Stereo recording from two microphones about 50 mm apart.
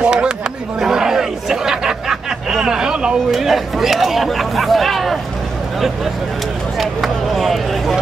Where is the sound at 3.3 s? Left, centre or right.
Centre.